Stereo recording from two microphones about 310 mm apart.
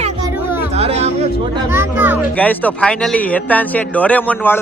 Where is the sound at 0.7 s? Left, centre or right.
Centre.